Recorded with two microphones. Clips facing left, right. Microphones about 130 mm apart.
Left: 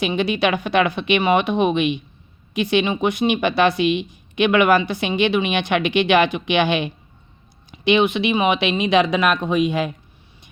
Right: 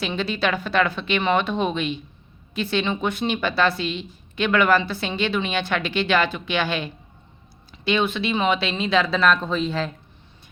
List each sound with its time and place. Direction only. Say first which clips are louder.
0.0 s speech: left 5 dB; 15° left (ahead or behind)